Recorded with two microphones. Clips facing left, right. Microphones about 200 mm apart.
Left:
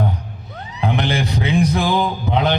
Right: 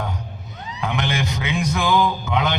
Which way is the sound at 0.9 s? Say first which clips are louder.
Left 4 dB; 35° left (ahead or behind).